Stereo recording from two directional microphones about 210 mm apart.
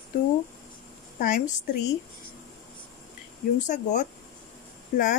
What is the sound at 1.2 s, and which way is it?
Speech, 40° left (ahead or behind).